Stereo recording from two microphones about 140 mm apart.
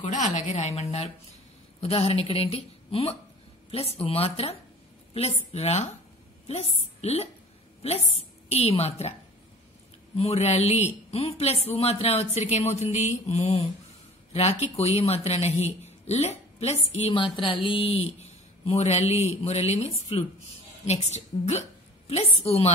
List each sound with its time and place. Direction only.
0.0 s a woman's voice: 60° left (ahead or behind)
10.1 s a woman's voice: 50° left (ahead or behind)